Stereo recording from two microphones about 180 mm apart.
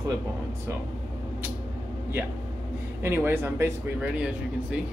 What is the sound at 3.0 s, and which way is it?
Speech, 10° right (ahead or behind).